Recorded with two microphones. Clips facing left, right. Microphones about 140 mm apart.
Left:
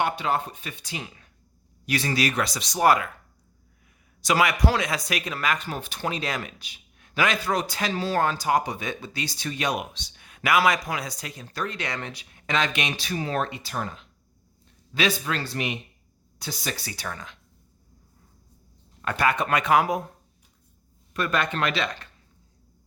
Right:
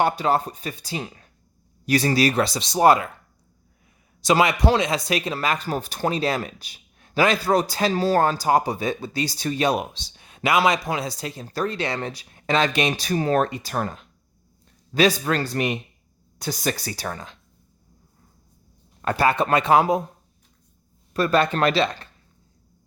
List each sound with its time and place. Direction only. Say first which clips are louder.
0.0 s speech: right 5 dB; 35° right (ahead or behind)
4.2 s speech: right 4 dB; 25° right (ahead or behind)
19.0 s speech: right 4 dB; 30° right (ahead or behind)
21.1 s speech: right 6 dB; 35° right (ahead or behind)